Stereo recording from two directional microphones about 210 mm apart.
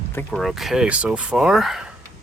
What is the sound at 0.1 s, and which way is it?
Speech, 5° left (ahead or behind).